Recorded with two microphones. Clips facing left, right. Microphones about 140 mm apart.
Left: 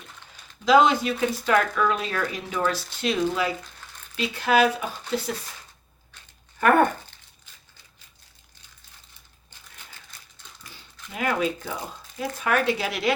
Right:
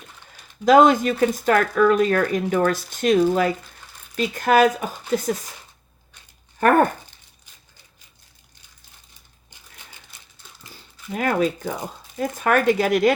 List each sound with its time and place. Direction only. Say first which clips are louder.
0.6 s speech: right 4 dB; 45° right (ahead or behind)
6.6 s speech: right 2 dB; 40° right (ahead or behind)
10.7 s speech: right 10 dB; 45° right (ahead or behind)